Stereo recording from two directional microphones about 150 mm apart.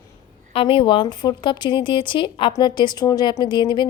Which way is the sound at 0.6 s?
35° left (ahead or behind).